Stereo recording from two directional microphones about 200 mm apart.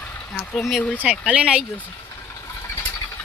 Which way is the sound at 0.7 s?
5° right (ahead or behind).